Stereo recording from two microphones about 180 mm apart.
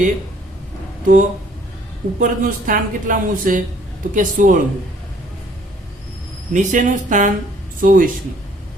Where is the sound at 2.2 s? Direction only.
50° right (ahead or behind).